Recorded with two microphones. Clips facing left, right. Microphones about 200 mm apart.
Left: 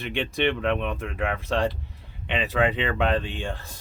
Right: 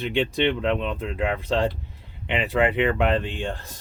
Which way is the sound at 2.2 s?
15° right (ahead or behind).